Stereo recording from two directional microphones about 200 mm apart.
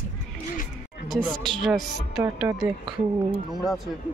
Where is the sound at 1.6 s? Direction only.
5° right (ahead or behind).